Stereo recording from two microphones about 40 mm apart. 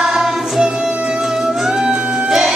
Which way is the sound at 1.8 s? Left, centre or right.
Right.